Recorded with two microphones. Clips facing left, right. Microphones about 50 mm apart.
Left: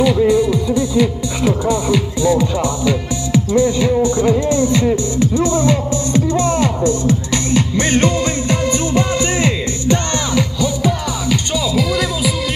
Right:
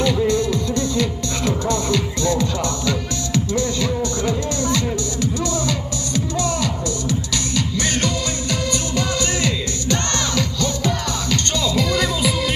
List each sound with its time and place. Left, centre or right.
0.0 s music: centre